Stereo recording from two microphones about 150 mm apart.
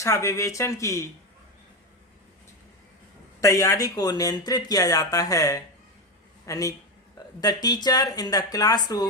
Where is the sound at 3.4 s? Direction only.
20° left (ahead or behind).